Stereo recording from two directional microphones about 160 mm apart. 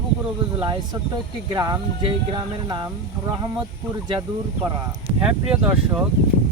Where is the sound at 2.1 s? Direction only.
35° right (ahead or behind).